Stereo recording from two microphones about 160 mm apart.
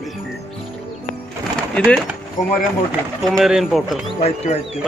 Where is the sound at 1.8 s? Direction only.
5° left (ahead or behind).